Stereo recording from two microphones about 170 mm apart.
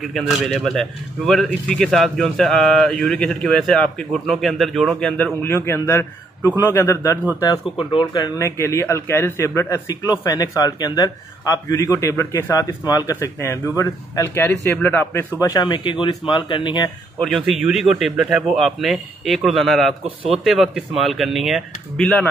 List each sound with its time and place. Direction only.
0.0 s a man's voice: centre (ahead or behind)
15.4 s a man's voice: 20° left (ahead or behind)
17.2 s speech: centre (ahead or behind)